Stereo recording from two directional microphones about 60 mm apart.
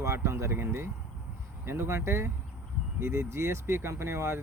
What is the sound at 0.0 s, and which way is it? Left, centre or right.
Speech, right.